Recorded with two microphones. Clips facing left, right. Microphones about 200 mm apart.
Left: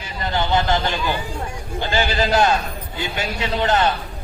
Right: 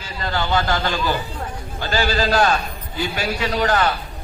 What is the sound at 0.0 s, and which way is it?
A man's voice, 20° left (ahead or behind).